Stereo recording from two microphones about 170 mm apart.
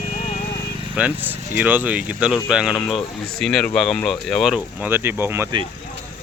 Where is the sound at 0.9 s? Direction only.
10° right (ahead or behind).